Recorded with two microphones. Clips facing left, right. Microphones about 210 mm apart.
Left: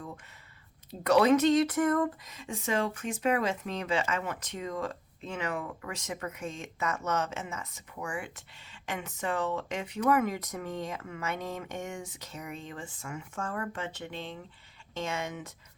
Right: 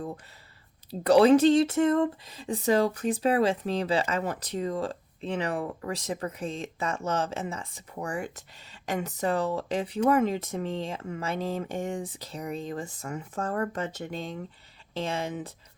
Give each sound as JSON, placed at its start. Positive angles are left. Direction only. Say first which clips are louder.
{"t": 0.9, "sound": "speech", "louder": "right 5 dB", "side_deg": -30}
{"t": 14.9, "sound": "speech", "louder": "right 4 dB", "side_deg": -35}